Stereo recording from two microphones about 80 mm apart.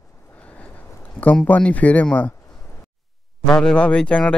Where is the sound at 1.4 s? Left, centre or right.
Centre.